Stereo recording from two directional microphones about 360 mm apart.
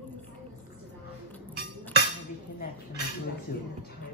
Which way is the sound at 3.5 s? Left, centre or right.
Left.